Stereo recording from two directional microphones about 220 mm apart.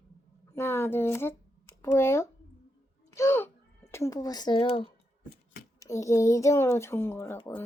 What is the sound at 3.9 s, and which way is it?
Speech, 15° left (ahead or behind).